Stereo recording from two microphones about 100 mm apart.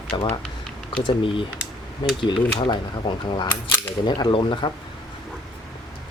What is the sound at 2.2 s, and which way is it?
Speech, 50° left (ahead or behind).